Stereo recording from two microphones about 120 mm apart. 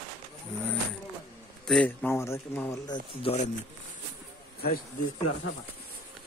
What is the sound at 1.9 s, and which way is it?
Speech, 15° left (ahead or behind).